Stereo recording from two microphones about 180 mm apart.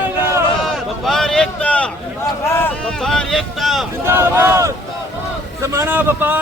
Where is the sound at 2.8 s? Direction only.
5° left (ahead or behind).